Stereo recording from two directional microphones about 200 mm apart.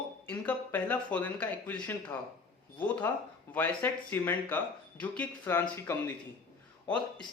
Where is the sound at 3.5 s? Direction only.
10° left (ahead or behind).